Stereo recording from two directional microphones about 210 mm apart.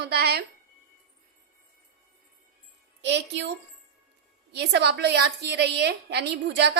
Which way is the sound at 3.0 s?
55° right (ahead or behind).